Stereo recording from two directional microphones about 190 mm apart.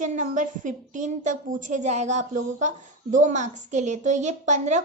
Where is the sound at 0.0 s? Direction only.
40° right (ahead or behind).